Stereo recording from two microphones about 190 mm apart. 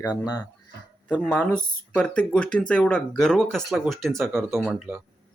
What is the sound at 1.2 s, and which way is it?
Speech, 5° left (ahead or behind).